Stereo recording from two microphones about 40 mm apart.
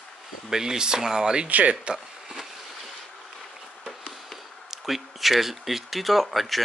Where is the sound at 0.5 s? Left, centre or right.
Centre.